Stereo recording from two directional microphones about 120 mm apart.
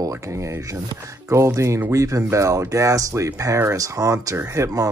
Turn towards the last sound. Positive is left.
turn(degrees=-25)  # may be behind; listen again after turning